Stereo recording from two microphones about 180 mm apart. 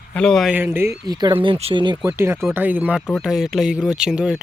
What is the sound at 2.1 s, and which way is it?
Speech, 15° right (ahead or behind).